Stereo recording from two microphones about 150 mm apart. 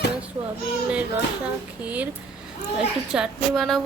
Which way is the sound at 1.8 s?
10° right (ahead or behind).